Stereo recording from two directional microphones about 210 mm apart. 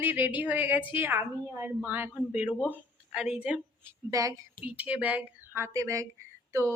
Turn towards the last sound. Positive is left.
turn(degrees=-15)  # may be behind; listen again after turning